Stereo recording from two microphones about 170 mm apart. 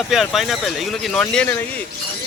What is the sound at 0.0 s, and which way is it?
Speech, centre (ahead or behind).